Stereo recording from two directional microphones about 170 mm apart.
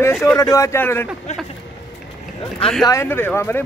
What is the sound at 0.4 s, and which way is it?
Speech, 20° left (ahead or behind).